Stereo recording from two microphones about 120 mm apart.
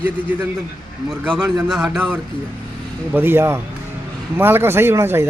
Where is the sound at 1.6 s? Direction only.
Centre (ahead or behind).